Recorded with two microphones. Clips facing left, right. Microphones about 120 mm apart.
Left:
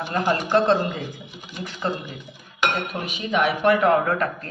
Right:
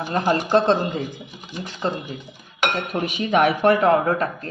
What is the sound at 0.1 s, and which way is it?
Speech, 30° right (ahead or behind).